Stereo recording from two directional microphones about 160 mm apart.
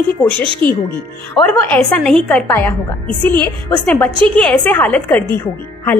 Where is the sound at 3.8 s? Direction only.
10° left (ahead or behind).